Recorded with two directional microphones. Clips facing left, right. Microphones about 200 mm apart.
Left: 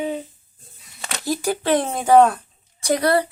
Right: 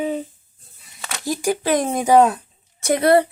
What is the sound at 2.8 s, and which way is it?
Speech, 25° right (ahead or behind).